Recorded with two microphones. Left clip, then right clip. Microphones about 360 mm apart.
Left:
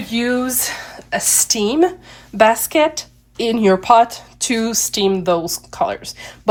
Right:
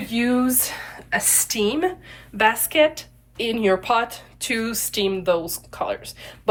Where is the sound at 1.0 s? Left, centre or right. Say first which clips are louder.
Left 5 dB; centre.